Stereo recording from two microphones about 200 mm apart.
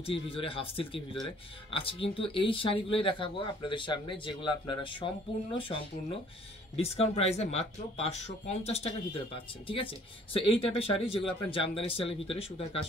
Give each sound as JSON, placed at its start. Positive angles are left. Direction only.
{"t": 0.0, "sound": "speech", "side_deg": 25}
{"t": 6.8, "sound": "speech", "side_deg": 30}